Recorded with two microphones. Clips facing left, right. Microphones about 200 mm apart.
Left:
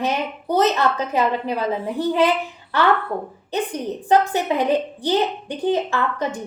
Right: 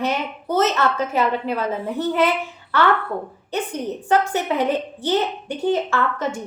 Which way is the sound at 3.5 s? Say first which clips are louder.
Left 1 dB; 15° left (ahead or behind).